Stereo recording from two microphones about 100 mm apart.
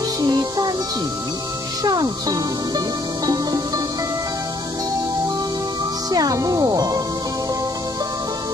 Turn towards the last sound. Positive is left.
turn(degrees=-40)  # may be behind; listen again after turning